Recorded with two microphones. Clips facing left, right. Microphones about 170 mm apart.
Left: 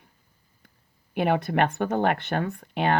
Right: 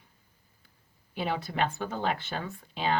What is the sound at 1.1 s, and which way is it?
Speech, 60° left (ahead or behind).